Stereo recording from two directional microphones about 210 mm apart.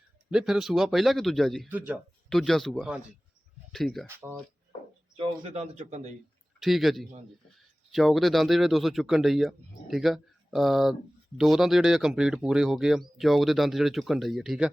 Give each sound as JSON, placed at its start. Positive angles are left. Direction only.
{"t": 0.3, "sound": "speech", "side_deg": -5}
{"t": 5.1, "sound": "speech", "side_deg": -25}
{"t": 6.6, "sound": "speech", "side_deg": 0}